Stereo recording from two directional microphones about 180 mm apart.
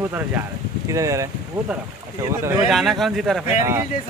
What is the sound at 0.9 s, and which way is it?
Speech, 15° right (ahead or behind).